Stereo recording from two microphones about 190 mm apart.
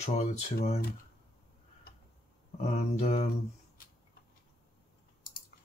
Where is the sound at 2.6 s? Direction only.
35° left (ahead or behind).